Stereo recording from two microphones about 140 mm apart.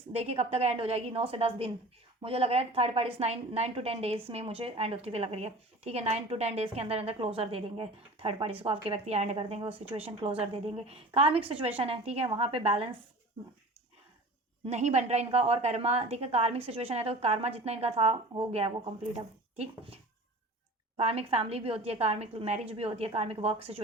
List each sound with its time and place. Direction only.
0.1 s a woman's voice: 50° right (ahead or behind)
14.7 s speech: 55° right (ahead or behind)